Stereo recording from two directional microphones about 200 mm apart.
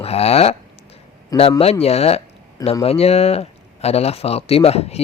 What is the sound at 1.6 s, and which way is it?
Speech, 30° left (ahead or behind).